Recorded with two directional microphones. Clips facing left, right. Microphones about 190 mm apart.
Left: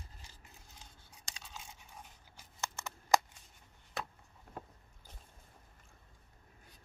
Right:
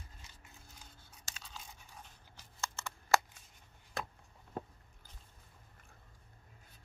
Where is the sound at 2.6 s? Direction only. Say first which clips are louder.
Left 1 dB; 20° left (ahead or behind).